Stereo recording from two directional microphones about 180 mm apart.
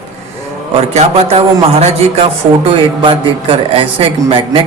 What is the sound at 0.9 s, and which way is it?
A man's voice, 35° right (ahead or behind).